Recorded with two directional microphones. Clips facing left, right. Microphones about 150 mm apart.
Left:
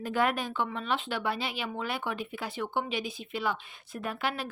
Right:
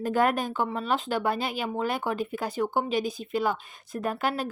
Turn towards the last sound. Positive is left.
turn(degrees=-40)  # may be behind; listen again after turning